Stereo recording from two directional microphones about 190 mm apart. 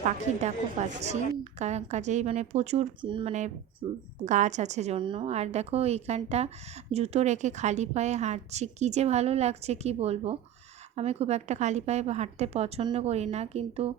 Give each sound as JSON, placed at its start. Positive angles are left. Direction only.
{"t": 0.0, "sound": "a woman's voice", "side_deg": -35}
{"t": 4.3, "sound": "a woman's voice", "side_deg": -40}